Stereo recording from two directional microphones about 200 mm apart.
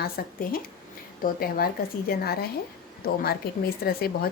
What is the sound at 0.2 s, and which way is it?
Speech, 50° left (ahead or behind).